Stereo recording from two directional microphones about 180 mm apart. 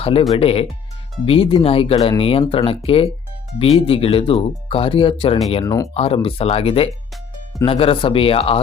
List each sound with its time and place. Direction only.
0.0 s speech: 30° left (ahead or behind)
5.6 s speech: 20° left (ahead or behind)
5.9 s speech: 35° left (ahead or behind)